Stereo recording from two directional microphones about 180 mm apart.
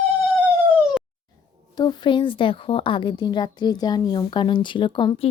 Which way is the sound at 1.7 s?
25° left (ahead or behind).